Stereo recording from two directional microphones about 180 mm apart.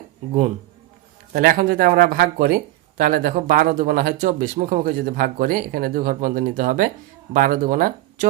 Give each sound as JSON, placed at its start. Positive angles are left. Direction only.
{"t": 1.3, "sound": "speech", "side_deg": -50}